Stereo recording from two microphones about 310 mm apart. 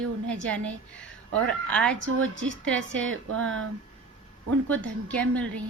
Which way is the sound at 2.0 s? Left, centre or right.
Right.